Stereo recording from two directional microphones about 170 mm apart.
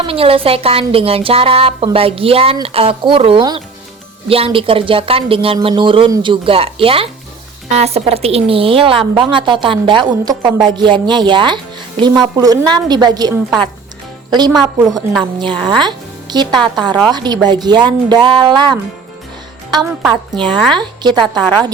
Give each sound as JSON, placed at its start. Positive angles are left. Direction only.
{"t": 0.0, "sound": "a woman's voice", "side_deg": -35}
{"t": 14.5, "sound": "a woman's voice", "side_deg": 0}
{"t": 15.2, "sound": "a woman's voice", "side_deg": -30}
{"t": 19.8, "sound": "a woman's voice", "side_deg": 0}
{"t": 20.7, "sound": "a woman's voice", "side_deg": -25}